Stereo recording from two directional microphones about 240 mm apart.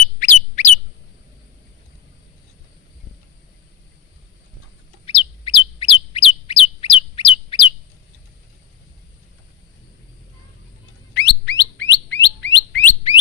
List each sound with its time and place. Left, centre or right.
0.2 s bird: left
5.0 s bird: left
11.1 s bird: left